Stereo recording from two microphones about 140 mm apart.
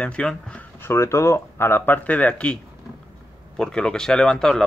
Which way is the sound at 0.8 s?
20° left (ahead or behind).